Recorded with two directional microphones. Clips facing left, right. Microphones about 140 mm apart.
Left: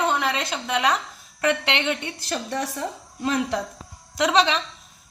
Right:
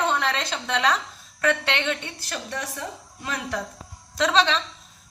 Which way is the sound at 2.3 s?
30° left (ahead or behind).